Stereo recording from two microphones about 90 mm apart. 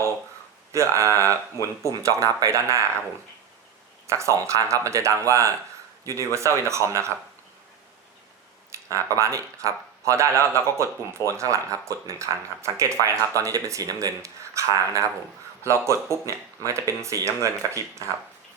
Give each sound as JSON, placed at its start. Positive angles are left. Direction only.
{"t": 0.7, "sound": "speech", "side_deg": -35}
{"t": 4.0, "sound": "speech", "side_deg": -35}
{"t": 8.7, "sound": "speech", "side_deg": -35}